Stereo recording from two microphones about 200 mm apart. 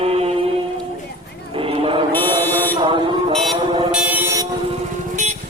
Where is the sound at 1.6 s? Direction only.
25° right (ahead or behind).